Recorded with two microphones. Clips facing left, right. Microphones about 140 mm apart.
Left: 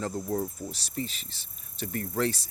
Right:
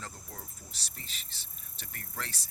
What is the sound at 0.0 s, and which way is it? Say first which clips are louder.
Speech: left 17 dB; 45° left (ahead or behind).